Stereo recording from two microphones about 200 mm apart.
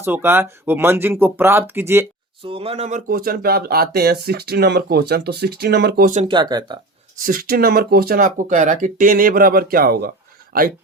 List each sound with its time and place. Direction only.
0.0 s speech: 10° right (ahead or behind)
2.4 s speech: 25° right (ahead or behind); by 6.1 s 55° right (ahead or behind)
6.2 s speech: 20° right (ahead or behind)
7.3 s speech: 45° right (ahead or behind)